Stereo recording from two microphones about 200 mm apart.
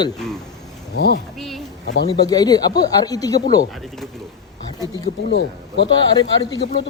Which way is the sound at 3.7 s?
Centre (ahead or behind).